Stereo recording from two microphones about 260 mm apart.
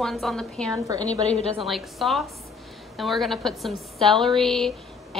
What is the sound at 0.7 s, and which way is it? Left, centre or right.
Speech, centre.